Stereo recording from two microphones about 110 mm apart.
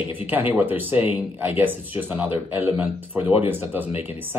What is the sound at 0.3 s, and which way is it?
Speech, 15° right (ahead or behind).